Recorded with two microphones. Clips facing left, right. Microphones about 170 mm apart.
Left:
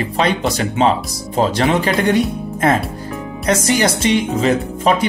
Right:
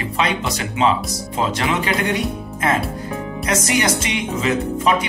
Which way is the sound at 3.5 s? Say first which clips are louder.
Left 4 dB; 35° left (ahead or behind).